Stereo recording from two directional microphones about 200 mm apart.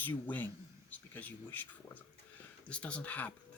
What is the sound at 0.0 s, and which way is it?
Speech, 10° left (ahead or behind).